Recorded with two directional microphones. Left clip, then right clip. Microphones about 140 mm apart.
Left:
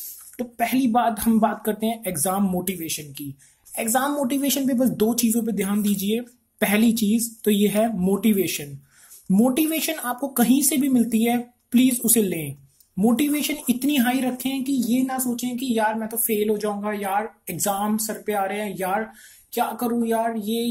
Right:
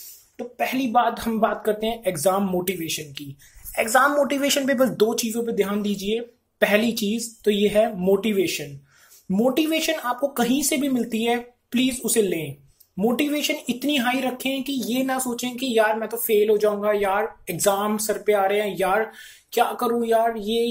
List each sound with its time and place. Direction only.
0.0 s speech: 50° left (ahead or behind); by 20.6 s 30° left (ahead or behind)